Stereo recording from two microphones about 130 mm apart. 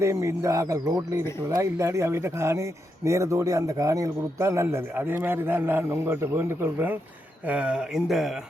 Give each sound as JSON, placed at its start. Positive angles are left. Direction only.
{"t": 0.0, "sound": "speech", "side_deg": -25}